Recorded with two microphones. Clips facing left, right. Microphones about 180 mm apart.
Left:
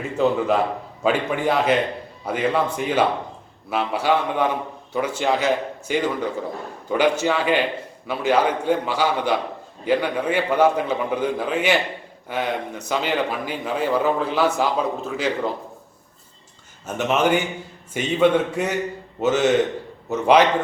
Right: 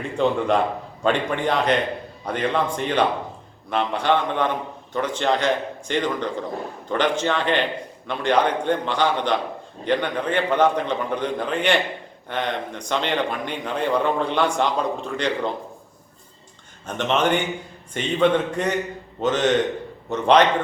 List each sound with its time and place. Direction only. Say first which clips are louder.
0.0 s a man's voice: left 1 dB; 5° left (ahead or behind)
16.8 s a man's voice: left 1 dB; 5° left (ahead or behind)